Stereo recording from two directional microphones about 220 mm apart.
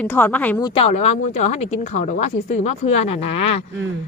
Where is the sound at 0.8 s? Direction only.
30° left (ahead or behind).